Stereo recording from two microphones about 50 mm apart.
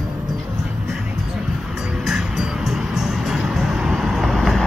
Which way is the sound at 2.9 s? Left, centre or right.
Centre.